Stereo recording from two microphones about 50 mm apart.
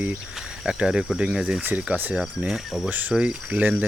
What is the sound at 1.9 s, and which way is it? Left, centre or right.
Speech, right.